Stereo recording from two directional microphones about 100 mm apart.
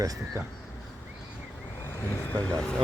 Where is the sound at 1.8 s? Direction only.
25° left (ahead or behind).